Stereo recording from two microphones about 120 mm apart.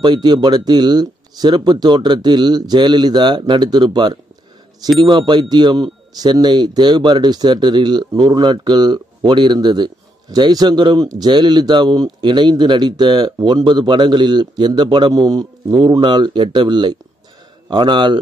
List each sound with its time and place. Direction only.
0.0 s speech: 40° right (ahead or behind)